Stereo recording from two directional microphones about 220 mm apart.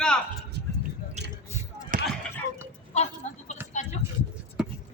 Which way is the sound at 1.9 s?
40° right (ahead or behind).